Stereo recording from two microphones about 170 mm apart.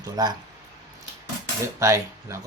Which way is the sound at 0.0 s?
25° right (ahead or behind).